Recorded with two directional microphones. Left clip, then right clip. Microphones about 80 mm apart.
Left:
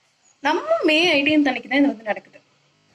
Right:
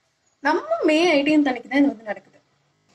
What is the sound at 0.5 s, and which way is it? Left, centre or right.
Speech, right.